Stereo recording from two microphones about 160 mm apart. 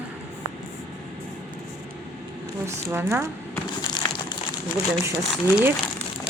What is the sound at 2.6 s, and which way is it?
Speech, 15° right (ahead or behind).